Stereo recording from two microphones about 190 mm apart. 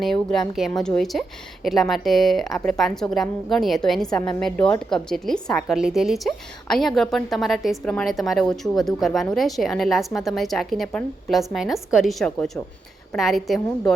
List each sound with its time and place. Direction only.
0.0 s a woman's voice: centre (ahead or behind)